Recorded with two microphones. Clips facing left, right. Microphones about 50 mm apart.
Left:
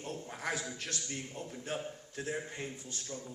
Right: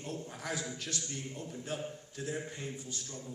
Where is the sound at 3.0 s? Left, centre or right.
Centre.